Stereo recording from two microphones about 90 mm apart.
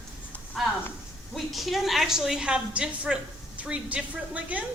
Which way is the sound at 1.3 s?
Centre (ahead or behind).